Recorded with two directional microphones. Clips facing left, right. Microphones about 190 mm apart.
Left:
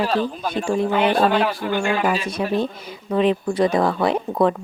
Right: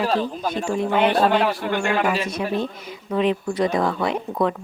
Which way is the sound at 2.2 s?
30° left (ahead or behind).